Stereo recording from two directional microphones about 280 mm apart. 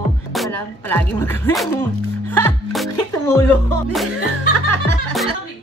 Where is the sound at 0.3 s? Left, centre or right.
Centre.